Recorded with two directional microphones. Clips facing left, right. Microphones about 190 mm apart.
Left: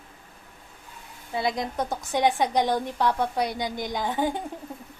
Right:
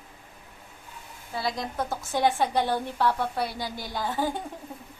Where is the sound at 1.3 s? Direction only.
20° left (ahead or behind).